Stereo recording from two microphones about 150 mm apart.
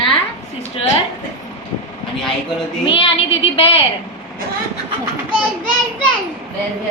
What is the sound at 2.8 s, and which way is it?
Speech, 40° left (ahead or behind).